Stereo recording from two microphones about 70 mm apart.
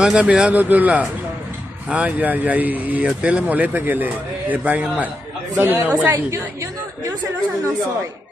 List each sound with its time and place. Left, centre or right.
0.0 s speech: centre
6.1 s a woman's voice: right